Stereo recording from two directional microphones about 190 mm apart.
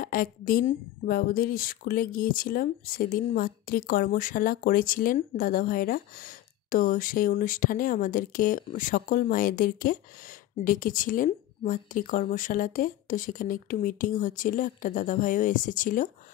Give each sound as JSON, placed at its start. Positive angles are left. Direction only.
{"t": 0.0, "sound": "speech", "side_deg": 50}